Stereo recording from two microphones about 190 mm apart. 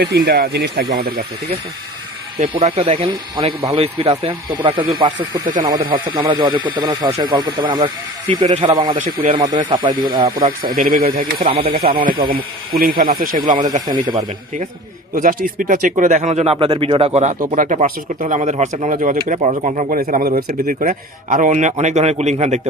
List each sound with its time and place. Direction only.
0.0 s speech: 55° right (ahead or behind)
2.4 s speech: 30° right (ahead or behind)
9.0 s speech: 45° right (ahead or behind)
9.2 s speech: 25° right (ahead or behind)
10.8 s speech: 45° right (ahead or behind)
11.3 s speech: 30° right (ahead or behind)
12.3 s speech: 50° right (ahead or behind)
13.8 s speech: 20° right (ahead or behind)
15.1 s speech: 45° right (ahead or behind)
20.0 s speech: 50° right (ahead or behind)